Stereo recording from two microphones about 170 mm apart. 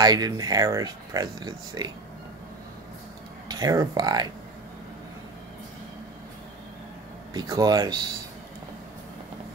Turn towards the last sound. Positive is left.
turn(degrees=-20)  # may be behind; listen again after turning